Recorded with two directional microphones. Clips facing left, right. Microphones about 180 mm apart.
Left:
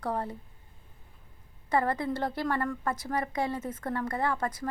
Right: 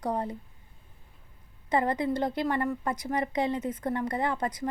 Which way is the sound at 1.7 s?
15° right (ahead or behind).